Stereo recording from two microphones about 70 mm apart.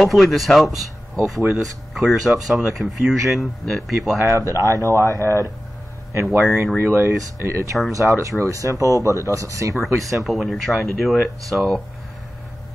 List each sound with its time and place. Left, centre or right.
0.0 s speech: centre
4.3 s speech: right
6.2 s speech: centre
6.9 s speech: right
9.9 s speech: centre